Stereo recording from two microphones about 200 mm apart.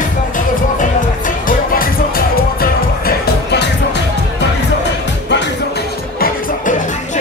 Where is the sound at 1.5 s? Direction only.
45° left (ahead or behind).